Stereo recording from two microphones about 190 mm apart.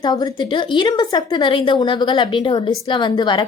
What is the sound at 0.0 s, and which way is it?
A woman's voice, 20° left (ahead or behind).